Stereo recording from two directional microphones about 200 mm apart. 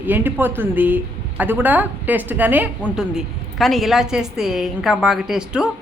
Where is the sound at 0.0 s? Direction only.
10° right (ahead or behind).